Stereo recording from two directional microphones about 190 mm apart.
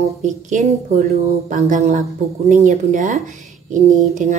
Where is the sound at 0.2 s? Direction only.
40° right (ahead or behind).